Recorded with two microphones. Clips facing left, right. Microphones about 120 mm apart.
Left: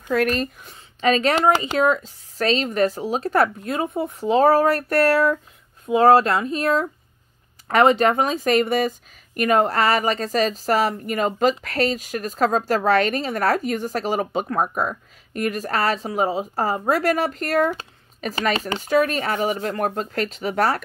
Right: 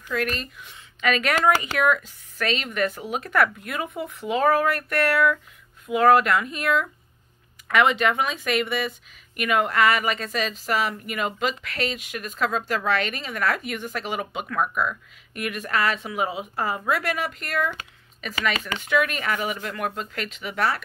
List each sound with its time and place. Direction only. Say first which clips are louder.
0.1 s speech: left 7 dB; 40° left (ahead or behind)